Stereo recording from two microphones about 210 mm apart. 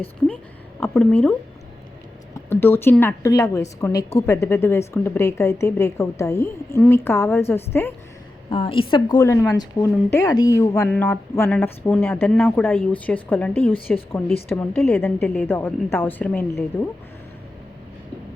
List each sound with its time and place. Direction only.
0.8 s a woman's voice: 5° left (ahead or behind)
2.5 s a woman's voice: 10° left (ahead or behind)
8.4 s a woman's voice: 25° left (ahead or behind); by 16.5 s 10° left (ahead or behind)